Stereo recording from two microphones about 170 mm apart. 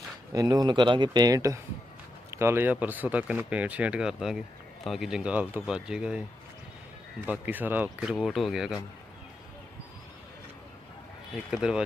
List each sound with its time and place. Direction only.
0.3 s speech: 20° right (ahead or behind); by 6.2 s 5° right (ahead or behind)
7.3 s speech: 10° right (ahead or behind)
11.5 s speech: 5° right (ahead or behind)